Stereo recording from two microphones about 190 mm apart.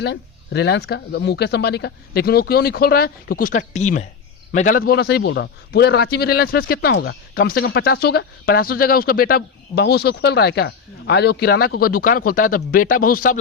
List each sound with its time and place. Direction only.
0.0 s a man's voice: 60° left (ahead or behind); by 4.8 s 40° left (ahead or behind)
4.9 s speech: 55° left (ahead or behind)
6.9 s speech: 65° left (ahead or behind); by 13.4 s 45° left (ahead or behind)